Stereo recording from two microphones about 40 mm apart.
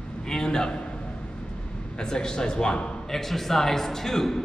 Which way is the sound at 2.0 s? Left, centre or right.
Centre.